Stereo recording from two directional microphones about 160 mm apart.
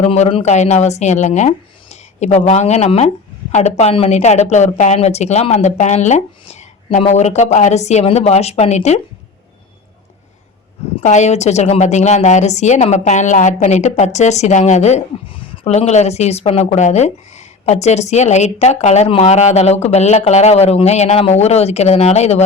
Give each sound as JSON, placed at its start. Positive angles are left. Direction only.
{"t": 0.0, "sound": "a woman's voice", "side_deg": 40}
{"t": 11.0, "sound": "a woman's voice", "side_deg": 45}